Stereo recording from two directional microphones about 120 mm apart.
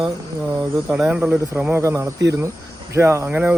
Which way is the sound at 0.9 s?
10° right (ahead or behind).